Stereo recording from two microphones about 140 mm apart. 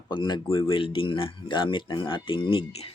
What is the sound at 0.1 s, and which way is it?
Speech, 30° left (ahead or behind).